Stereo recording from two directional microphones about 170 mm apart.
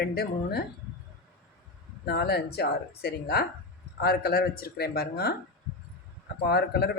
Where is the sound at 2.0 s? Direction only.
70° left (ahead or behind).